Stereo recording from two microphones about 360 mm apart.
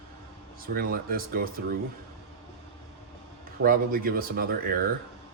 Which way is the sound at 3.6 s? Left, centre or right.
Right.